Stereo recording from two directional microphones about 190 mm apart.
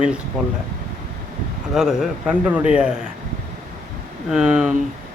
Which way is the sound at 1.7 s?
Centre (ahead or behind).